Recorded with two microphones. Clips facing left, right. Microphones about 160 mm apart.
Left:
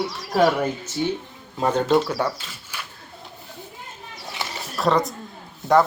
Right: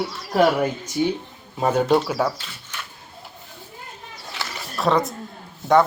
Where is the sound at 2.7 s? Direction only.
10° left (ahead or behind).